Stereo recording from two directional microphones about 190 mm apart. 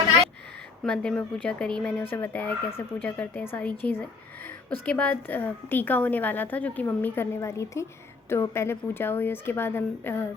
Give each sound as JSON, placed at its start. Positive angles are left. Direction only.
{"t": 0.9, "sound": "a woman's voice", "side_deg": 5}